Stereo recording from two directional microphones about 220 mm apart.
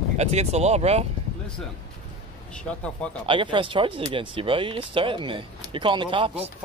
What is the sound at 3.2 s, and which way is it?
Speech, 20° right (ahead or behind).